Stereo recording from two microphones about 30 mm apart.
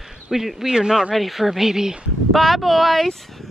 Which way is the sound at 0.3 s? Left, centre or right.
Centre.